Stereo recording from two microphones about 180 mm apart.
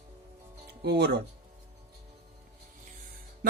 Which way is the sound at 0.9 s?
65° right (ahead or behind).